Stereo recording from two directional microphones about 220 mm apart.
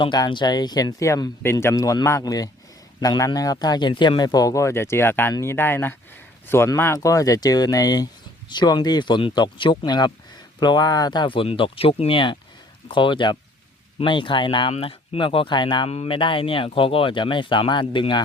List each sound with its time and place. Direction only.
0.0 s speech: 20° left (ahead or behind)